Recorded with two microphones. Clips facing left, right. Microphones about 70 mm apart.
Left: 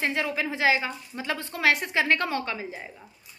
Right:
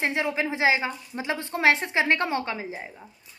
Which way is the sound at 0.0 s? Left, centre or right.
Right.